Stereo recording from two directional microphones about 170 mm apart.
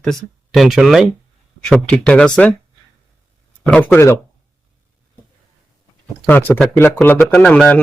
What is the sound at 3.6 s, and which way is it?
Speech, 10° left (ahead or behind).